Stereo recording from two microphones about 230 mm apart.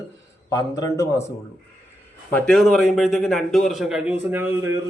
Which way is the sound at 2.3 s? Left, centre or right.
Centre.